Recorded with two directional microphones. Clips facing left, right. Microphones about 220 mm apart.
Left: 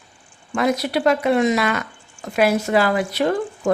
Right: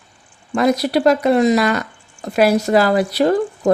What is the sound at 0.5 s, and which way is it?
Speech, 40° right (ahead or behind).